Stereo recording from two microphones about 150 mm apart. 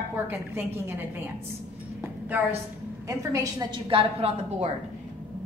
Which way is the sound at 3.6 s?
35° right (ahead or behind).